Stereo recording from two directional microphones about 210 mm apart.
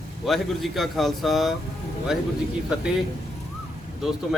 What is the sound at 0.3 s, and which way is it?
Speech, centre (ahead or behind).